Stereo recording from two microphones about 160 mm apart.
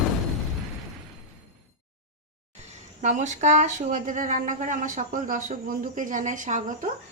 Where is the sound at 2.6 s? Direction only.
50° right (ahead or behind).